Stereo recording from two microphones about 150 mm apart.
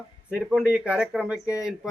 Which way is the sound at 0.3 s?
5° right (ahead or behind).